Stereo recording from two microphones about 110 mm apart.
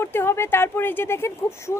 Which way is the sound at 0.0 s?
20° left (ahead or behind).